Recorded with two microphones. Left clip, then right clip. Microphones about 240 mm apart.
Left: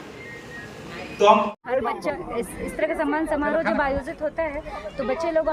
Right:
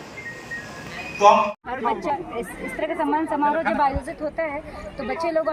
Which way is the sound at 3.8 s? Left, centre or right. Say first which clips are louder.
Right 2 dB; centre.